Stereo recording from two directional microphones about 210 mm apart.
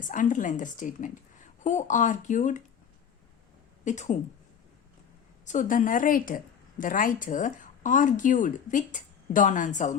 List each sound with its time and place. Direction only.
0.0 s speech: 40° left (ahead or behind)
3.8 s speech: 35° left (ahead or behind)
5.5 s speech: 40° left (ahead or behind)